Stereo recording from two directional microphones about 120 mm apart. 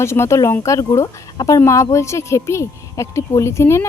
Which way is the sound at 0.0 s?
25° left (ahead or behind).